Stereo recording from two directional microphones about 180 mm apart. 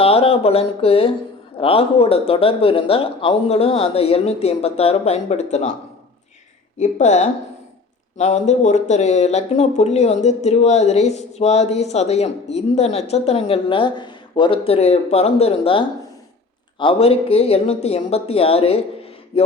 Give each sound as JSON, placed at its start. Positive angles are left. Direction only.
{"t": 0.0, "sound": "speech", "side_deg": 35}
{"t": 6.7, "sound": "speech", "side_deg": 40}